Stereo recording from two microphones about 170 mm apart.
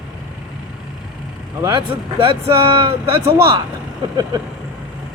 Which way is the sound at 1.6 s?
25° right (ahead or behind).